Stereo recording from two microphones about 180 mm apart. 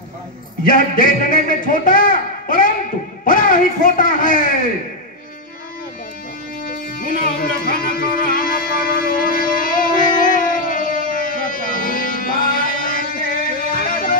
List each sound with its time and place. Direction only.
0.7 s speech: 50° left (ahead or behind)
6.6 s music: 50° left (ahead or behind)